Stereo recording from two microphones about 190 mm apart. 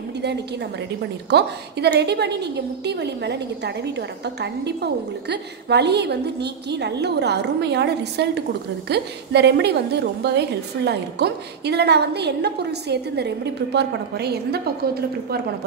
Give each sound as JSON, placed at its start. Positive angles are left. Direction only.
{"t": 1.3, "sound": "a woman's voice", "side_deg": -60}